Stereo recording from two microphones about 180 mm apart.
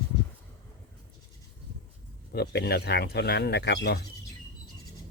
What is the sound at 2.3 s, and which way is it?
Speech, 65° left (ahead or behind).